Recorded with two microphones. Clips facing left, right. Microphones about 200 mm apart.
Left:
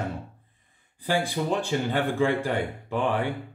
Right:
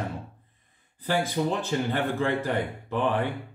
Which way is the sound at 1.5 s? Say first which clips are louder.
Left 1 dB; 15° left (ahead or behind).